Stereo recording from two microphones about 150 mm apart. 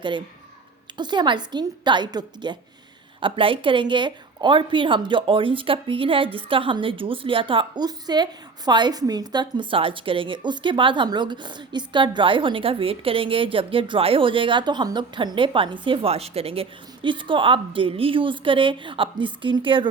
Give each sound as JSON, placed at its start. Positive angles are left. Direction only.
{"t": 0.9, "sound": "a woman's voice", "side_deg": -30}